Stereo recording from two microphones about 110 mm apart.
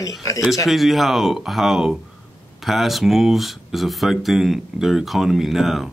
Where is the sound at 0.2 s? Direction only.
30° left (ahead or behind).